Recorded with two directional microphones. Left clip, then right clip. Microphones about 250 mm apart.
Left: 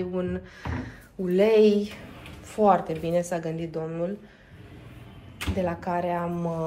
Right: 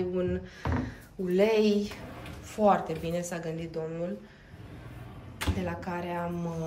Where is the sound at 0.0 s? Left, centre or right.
Centre.